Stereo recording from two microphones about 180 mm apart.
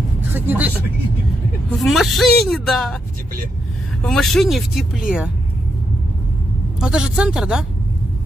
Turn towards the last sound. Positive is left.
turn(degrees=-5)  # may be behind; listen again after turning